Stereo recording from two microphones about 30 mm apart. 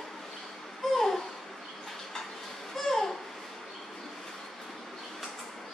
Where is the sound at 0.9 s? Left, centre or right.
Centre.